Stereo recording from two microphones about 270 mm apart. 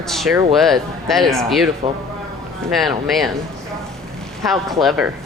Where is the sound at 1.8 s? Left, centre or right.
Right.